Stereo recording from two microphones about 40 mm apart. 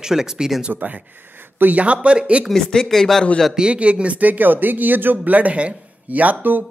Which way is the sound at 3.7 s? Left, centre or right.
Right.